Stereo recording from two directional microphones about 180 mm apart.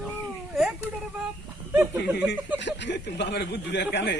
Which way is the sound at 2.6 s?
80° left.